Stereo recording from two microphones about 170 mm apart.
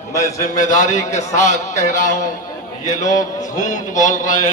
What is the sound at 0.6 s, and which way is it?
Speech, 50° left (ahead or behind).